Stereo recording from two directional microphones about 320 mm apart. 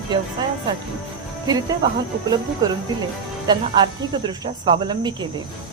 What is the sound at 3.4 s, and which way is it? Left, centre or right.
Speech, centre.